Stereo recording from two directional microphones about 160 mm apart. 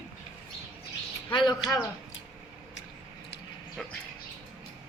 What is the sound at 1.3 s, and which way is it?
Speech, 30° left (ahead or behind).